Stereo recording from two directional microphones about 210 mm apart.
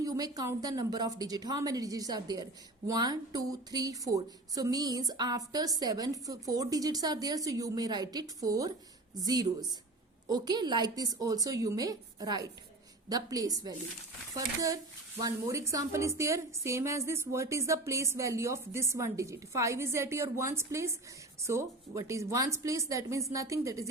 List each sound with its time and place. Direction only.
0.0 s a woman's voice: 15° right (ahead or behind)